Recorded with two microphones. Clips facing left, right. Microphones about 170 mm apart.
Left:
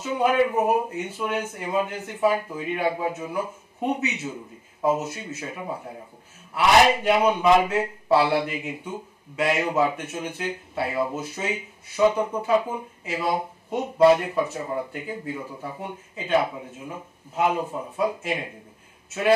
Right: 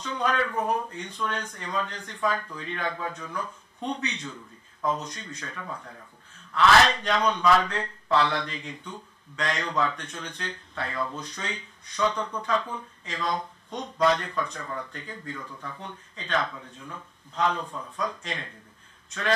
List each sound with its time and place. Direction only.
0.0 s speech: 10° left (ahead or behind)
5.7 s speech: 25° left (ahead or behind)